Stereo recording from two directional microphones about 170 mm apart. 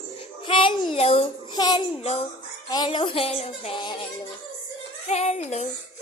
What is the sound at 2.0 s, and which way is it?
Speech, 40° left (ahead or behind).